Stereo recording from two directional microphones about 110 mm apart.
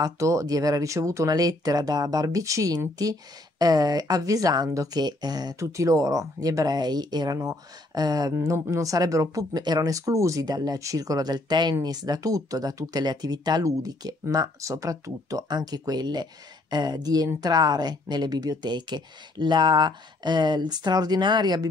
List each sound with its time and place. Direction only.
0.0 s speech: 30° right (ahead or behind)
8.4 s speech: 25° right (ahead or behind); by 21.6 s 40° right (ahead or behind)